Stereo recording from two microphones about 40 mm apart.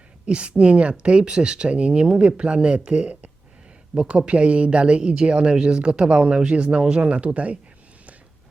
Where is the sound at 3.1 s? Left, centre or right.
Right.